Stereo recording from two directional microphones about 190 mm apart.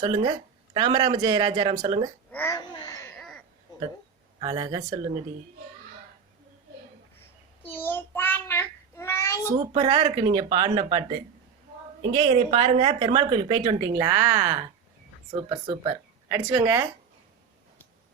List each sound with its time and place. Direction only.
0.0 s a woman's voice: 25° right (ahead or behind)
2.3 s speech: 10° left (ahead or behind)
2.7 s baby cry: 20° left (ahead or behind)
4.4 s a woman's voice: 25° right (ahead or behind)
7.6 s child singing: 10° left (ahead or behind)
9.7 s a woman's voice: 25° right (ahead or behind)
12.1 s a woman's voice: 30° right (ahead or behind); by 14.6 s 15° right (ahead or behind)
15.3 s speech: 25° right (ahead or behind)
16.5 s speech: 15° right (ahead or behind)